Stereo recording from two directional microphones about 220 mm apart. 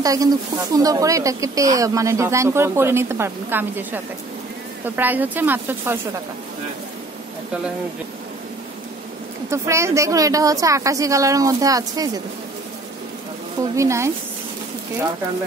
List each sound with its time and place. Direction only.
0.0 s a woman's voice: 15° right (ahead or behind)
9.5 s a woman's voice: 15° right (ahead or behind)
13.7 s a woman's voice: 15° right (ahead or behind)